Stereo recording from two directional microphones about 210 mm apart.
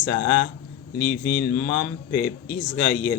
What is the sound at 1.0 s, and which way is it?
Speech, 45° left (ahead or behind).